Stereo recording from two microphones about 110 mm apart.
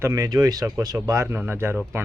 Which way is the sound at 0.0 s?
30° right (ahead or behind).